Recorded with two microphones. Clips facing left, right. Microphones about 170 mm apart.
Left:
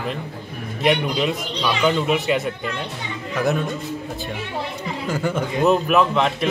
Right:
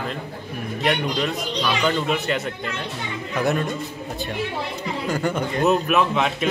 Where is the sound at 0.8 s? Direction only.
5° left (ahead or behind).